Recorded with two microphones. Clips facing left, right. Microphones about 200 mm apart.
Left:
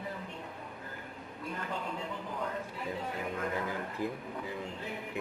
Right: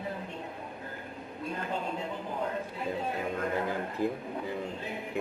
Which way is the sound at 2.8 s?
25° right (ahead or behind).